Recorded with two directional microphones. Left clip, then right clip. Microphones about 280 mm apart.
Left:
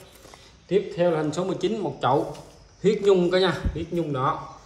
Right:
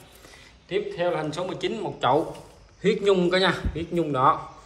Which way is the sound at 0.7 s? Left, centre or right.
Left.